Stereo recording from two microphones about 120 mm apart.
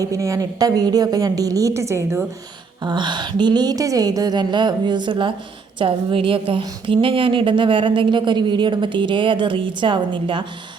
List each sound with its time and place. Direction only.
0.0 s a woman's voice: 25° right (ahead or behind)
2.8 s a woman's voice: 40° right (ahead or behind)